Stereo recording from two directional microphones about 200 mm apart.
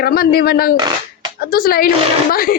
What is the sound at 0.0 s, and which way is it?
Speech, 50° left (ahead or behind).